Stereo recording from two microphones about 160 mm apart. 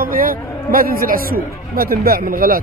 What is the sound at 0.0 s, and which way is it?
Speech, 65° right (ahead or behind).